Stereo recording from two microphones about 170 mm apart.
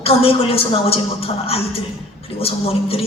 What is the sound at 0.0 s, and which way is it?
A man's voice, 35° left (ahead or behind).